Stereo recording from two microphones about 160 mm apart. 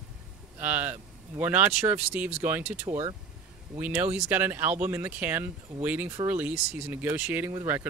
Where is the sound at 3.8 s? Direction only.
10° right (ahead or behind).